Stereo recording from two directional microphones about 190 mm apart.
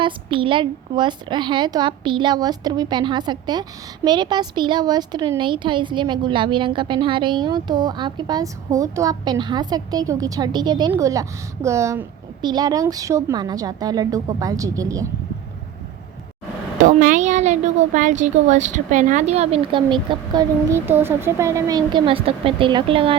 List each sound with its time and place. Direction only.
0.0 s a woman's voice: 25° right (ahead or behind)
16.8 s a woman's voice: 45° right (ahead or behind); by 23.1 s 30° right (ahead or behind)